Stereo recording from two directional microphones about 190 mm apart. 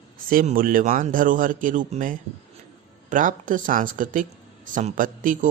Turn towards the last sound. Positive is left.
turn(degrees=-45)  # may be behind; listen again after turning